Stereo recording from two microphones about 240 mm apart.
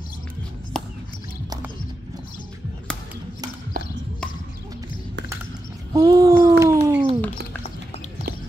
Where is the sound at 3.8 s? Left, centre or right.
Right.